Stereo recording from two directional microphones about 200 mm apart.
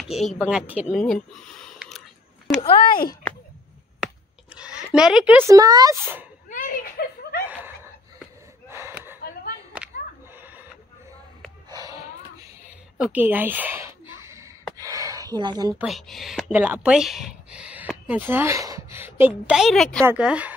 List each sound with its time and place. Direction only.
0.1 s speech: centre (ahead or behind)
2.9 s speech: 45° left (ahead or behind)
4.6 s speech: 5° right (ahead or behind)
5.6 s speech: 20° right (ahead or behind)
6.5 s a sound: 45° left (ahead or behind)
7.4 s chuckle: 10° right (ahead or behind)
8.6 s gasp: 10° right (ahead or behind)
10.3 s printer: 10° right (ahead or behind)
11.7 s a sound: 20° right (ahead or behind)
12.9 s a sound: 5° right (ahead or behind)
15.8 s speech: centre (ahead or behind)